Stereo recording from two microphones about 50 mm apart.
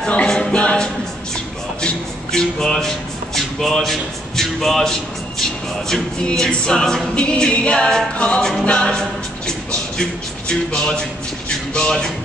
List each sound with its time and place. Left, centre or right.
0.3 s a capella: centre
1.8 s music: centre
4.4 s speech: centre
5.4 s a capella: centre
9.5 s music: centre